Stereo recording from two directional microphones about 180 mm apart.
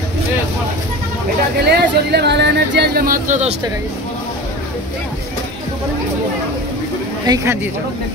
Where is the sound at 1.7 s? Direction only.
65° right (ahead or behind); by 3.6 s 40° right (ahead or behind).